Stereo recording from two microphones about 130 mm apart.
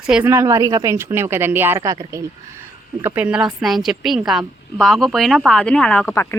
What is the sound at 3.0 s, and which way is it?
Speech, 10° right (ahead or behind).